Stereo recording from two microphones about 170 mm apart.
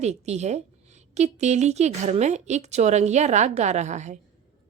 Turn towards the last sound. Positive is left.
turn(degrees=-45)  # may be behind; listen again after turning